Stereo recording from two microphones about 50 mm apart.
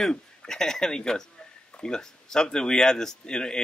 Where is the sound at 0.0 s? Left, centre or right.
Centre.